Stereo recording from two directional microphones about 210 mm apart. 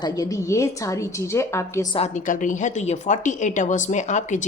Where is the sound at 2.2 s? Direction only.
40° left (ahead or behind).